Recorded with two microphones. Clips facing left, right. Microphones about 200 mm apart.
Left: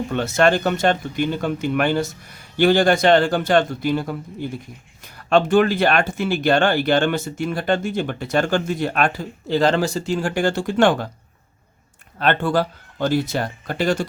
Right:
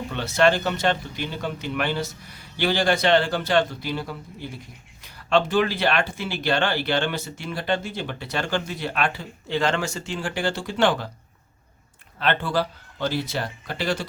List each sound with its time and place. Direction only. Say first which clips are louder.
0.1 s speech: left 2 dB; 50° left (ahead or behind)
12.2 s speech: left 4 dB; 50° left (ahead or behind)